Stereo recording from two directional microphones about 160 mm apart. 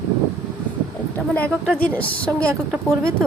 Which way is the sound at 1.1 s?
10° left (ahead or behind).